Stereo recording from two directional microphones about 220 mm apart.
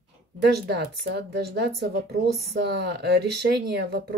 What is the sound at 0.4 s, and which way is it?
Speech, 50° right (ahead or behind).